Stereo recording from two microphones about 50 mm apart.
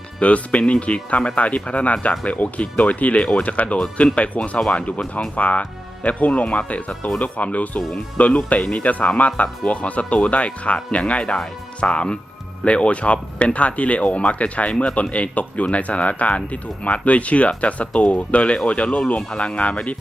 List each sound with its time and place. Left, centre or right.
0.2 s speech: left